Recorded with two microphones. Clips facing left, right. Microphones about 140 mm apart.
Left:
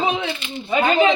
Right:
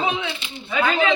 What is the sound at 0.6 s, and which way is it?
Speech, 40° left (ahead or behind).